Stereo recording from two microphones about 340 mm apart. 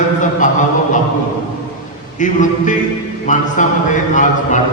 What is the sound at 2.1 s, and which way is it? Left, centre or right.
Speech, left.